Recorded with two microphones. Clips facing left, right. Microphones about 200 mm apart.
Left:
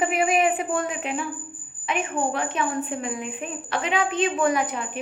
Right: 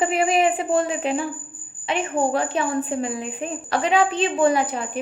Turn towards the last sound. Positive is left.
turn(degrees=-35)  # may be behind; listen again after turning